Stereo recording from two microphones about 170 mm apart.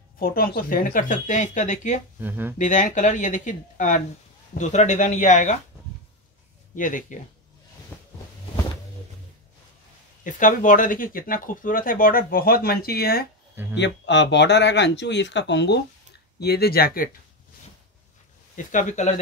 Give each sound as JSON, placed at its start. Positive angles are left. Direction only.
{"t": 0.2, "sound": "speech", "side_deg": 60}
{"t": 2.1, "sound": "speech", "side_deg": -10}
{"t": 2.6, "sound": "speech", "side_deg": 45}
{"t": 6.7, "sound": "speech", "side_deg": 50}
{"t": 7.9, "sound": "a sound", "side_deg": 10}
{"t": 10.2, "sound": "speech", "side_deg": 50}
{"t": 13.7, "sound": "speech", "side_deg": 90}
{"t": 16.3, "sound": "speech", "side_deg": 70}
{"t": 18.6, "sound": "speech", "side_deg": 50}